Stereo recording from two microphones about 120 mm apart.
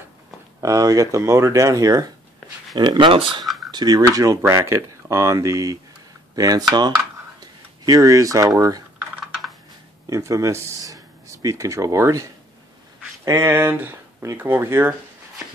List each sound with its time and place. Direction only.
0.6 s speech: 30° right (ahead or behind); by 3.4 s 45° right (ahead or behind)
3.4 s a sound: centre (ahead or behind)
3.7 s speech: 35° right (ahead or behind)
9.2 s computer keyboard: centre (ahead or behind)
10.0 s speech: 25° right (ahead or behind)